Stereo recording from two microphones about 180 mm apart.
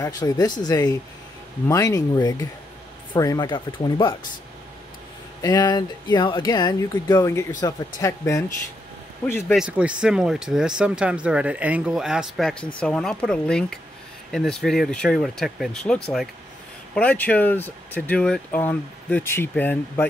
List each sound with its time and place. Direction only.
0.0 s speech: 20° left (ahead or behind)
5.4 s speech: 20° left (ahead or behind)
9.2 s speech: 5° left (ahead or behind)